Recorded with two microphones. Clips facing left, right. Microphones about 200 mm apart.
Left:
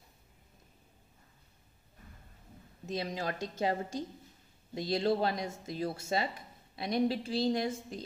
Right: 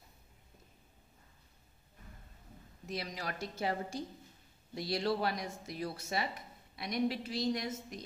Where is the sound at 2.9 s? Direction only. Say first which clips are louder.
Left 5 dB; 25° left (ahead or behind).